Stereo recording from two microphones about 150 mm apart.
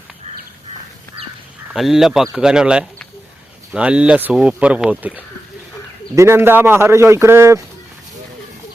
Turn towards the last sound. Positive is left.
turn(degrees=-15)  # may be behind; listen again after turning